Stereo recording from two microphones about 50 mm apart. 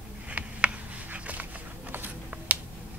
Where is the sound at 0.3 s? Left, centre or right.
Right.